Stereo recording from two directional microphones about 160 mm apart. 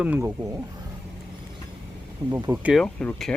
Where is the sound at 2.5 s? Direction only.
10° right (ahead or behind).